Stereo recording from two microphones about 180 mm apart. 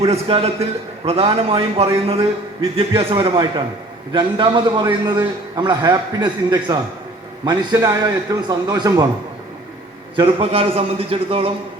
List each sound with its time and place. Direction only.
0.0 s a man's voice: 35° right (ahead or behind)
10.2 s a man's voice: 30° right (ahead or behind)